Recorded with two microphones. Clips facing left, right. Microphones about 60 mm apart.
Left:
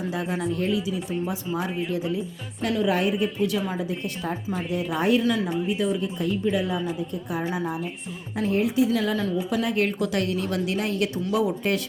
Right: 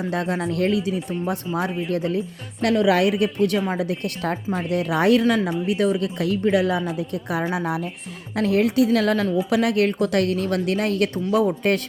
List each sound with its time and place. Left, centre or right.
0.1 s a woman's voice: right
5.2 s speech: right
5.5 s a woman's voice: right
7.5 s a woman's voice: right
8.4 s a woman's voice: right